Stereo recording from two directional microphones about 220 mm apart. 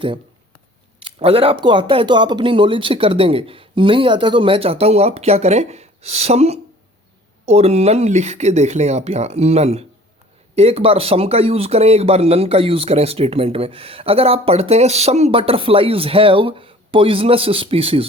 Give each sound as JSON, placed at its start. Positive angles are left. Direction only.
{"t": 1.0, "sound": "speech", "side_deg": -25}